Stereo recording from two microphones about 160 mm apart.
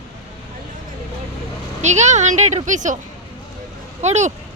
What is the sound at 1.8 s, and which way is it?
A woman's voice, 45° right (ahead or behind).